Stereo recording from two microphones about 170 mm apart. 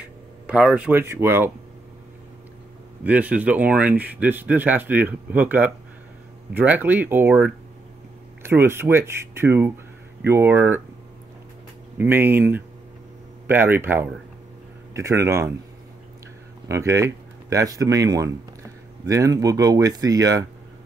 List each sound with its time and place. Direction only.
0.5 s speech: 5° right (ahead or behind)
3.0 s speech: 10° right (ahead or behind)
12.0 s speech: 10° right (ahead or behind)
16.6 s speech: 15° right (ahead or behind)